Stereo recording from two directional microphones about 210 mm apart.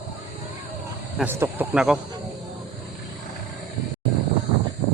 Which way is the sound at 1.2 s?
10° right (ahead or behind).